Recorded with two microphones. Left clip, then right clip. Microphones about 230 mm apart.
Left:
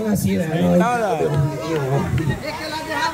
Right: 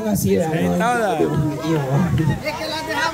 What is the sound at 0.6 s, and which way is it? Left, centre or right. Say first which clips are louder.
Speech: left 1 dB; centre.